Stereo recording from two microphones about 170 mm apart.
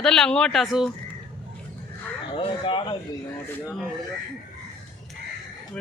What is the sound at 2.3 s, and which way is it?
Speech, 30° left (ahead or behind).